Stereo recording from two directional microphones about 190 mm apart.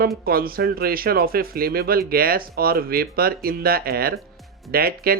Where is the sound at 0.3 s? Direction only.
50° right (ahead or behind).